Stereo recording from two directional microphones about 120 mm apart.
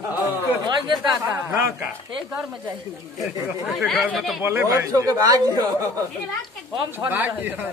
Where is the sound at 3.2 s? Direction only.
Centre (ahead or behind).